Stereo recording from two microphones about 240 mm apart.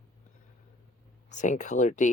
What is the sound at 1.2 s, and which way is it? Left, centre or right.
Speech, left.